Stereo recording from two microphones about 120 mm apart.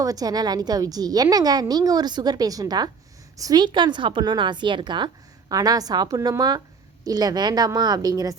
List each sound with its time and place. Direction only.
0.0 s a woman's voice: 30° right (ahead or behind)